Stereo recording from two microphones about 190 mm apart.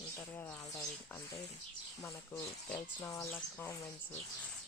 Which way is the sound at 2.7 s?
15° left (ahead or behind).